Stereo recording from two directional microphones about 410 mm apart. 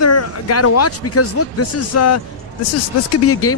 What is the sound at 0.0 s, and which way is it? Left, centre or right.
Speech, left.